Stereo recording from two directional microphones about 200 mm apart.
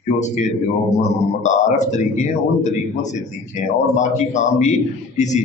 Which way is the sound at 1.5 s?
35° left (ahead or behind).